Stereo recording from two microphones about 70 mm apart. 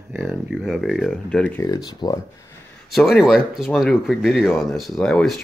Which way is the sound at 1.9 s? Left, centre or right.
Left.